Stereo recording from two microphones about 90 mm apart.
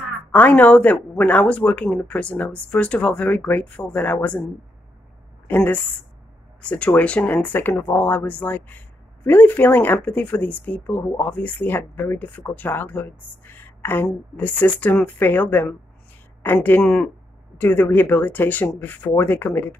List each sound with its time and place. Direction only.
0.3 s speech: 15° left (ahead or behind)
5.5 s speech: 20° left (ahead or behind)